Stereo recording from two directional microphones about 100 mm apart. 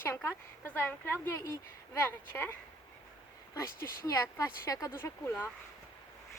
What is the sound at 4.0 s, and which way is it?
Speech, 30° left (ahead or behind).